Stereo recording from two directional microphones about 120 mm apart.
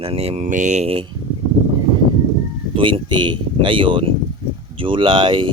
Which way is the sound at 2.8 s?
45° right (ahead or behind).